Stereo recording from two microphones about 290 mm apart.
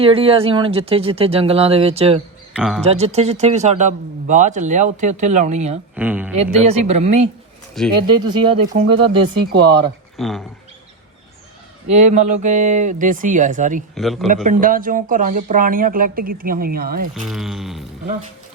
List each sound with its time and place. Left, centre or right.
0.0 s a man's voice: centre
2.5 s speech: centre
2.8 s a man's voice: right
6.0 s speech: centre
6.7 s a man's voice: right
7.8 s speech: centre
8.2 s speech: centre
9.5 s speech: right
10.2 s speech: centre
11.9 s a man's voice: right
13.9 s speech: centre
14.4 s a man's voice: right
17.2 s speech: centre